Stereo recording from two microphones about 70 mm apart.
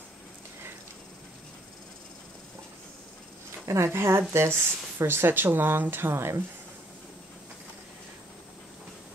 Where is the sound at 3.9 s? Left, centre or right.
Right.